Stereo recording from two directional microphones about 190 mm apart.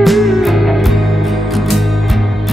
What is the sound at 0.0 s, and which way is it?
Music, centre (ahead or behind).